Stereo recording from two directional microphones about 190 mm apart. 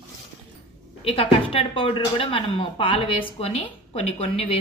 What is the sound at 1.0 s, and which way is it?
A woman's voice, 30° left (ahead or behind).